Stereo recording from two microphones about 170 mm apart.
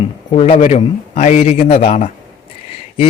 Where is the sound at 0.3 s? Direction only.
35° left (ahead or behind).